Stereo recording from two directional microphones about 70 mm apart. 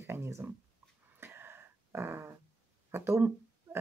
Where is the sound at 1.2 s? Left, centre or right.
Right.